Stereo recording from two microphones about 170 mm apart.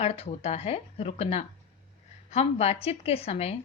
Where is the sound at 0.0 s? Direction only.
40° left (ahead or behind).